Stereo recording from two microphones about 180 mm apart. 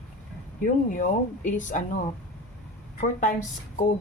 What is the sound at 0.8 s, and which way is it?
Speech, 45° left (ahead or behind).